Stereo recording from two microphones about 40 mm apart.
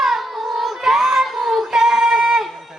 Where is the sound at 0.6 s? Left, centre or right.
Centre.